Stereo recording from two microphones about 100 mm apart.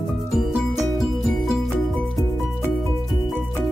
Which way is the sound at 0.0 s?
Centre (ahead or behind).